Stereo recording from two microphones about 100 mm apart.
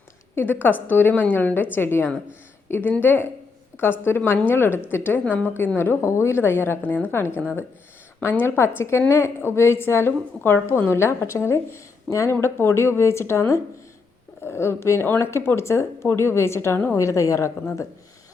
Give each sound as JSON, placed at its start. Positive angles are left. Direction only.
{"t": 0.3, "sound": "speech", "side_deg": 20}
{"t": 17.0, "sound": "speech", "side_deg": 30}